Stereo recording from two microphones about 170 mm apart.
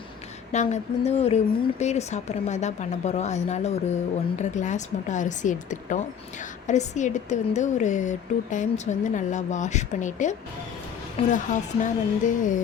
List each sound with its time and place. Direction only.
0.5 s a woman's voice: 45° left (ahead or behind)